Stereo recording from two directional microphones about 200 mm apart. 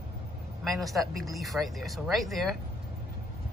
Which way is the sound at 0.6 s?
Centre (ahead or behind).